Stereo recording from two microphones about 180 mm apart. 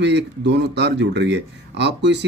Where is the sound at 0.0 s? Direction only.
75° right (ahead or behind).